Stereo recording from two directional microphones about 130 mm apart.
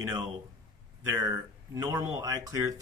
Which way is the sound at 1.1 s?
25° right (ahead or behind).